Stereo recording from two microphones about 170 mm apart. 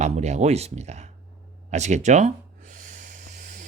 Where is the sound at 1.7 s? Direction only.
40° right (ahead or behind).